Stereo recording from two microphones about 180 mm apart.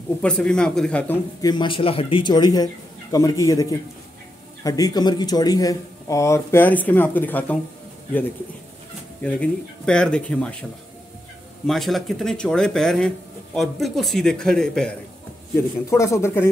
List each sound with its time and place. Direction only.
0.2 s speech: 5° left (ahead or behind)
1.4 s speech: 25° left (ahead or behind)
4.6 s speech: 20° left (ahead or behind)
9.2 s speech: 5° left (ahead or behind)
11.6 s speech: centre (ahead or behind)
15.9 s speech: 15° left (ahead or behind)